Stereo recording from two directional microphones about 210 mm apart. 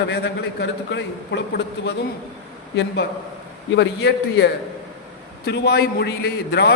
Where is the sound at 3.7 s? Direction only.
55° left (ahead or behind).